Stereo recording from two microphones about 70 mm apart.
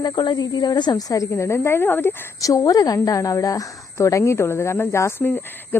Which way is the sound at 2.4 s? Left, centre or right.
Left.